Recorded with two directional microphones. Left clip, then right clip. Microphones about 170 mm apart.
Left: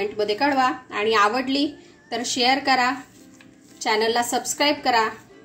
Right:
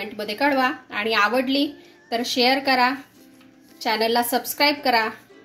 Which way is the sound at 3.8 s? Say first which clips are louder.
Even; 35° right (ahead or behind).